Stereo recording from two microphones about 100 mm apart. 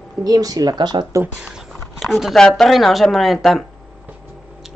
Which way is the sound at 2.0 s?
Centre (ahead or behind).